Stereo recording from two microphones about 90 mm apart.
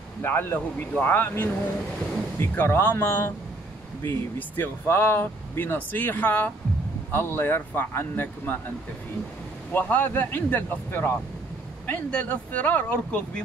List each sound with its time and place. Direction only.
0.2 s speech: 25° left (ahead or behind)